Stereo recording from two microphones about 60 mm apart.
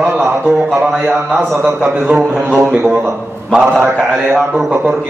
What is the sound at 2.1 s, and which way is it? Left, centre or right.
Speech, right.